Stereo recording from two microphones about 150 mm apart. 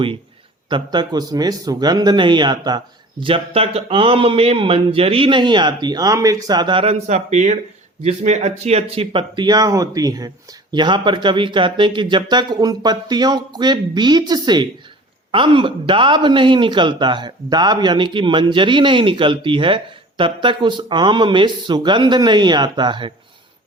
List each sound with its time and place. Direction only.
0.7 s speech: 30° right (ahead or behind)